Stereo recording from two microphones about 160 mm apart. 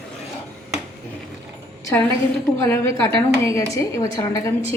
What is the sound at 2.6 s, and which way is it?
A woman's voice, 15° left (ahead or behind).